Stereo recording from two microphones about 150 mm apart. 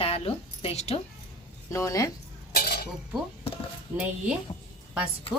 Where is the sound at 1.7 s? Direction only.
20° left (ahead or behind).